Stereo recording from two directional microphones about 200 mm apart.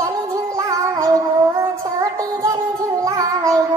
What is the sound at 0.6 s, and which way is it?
Music, 15° right (ahead or behind).